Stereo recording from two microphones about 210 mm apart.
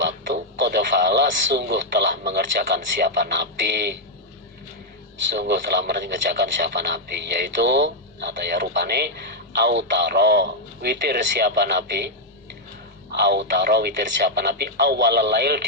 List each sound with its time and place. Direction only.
0.6 s speech: 55° right (ahead or behind)
5.3 s speech: 55° right (ahead or behind)